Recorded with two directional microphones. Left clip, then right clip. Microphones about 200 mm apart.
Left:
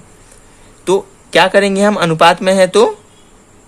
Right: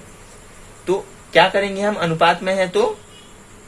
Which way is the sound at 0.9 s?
50° left (ahead or behind).